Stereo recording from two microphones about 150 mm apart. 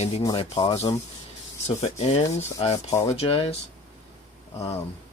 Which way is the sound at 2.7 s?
20° left (ahead or behind).